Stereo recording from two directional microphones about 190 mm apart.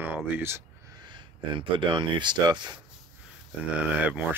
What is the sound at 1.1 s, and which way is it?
Speech, 25° right (ahead or behind).